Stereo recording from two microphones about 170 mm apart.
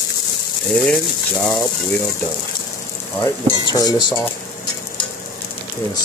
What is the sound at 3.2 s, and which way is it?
Cutlery, 20° left (ahead or behind).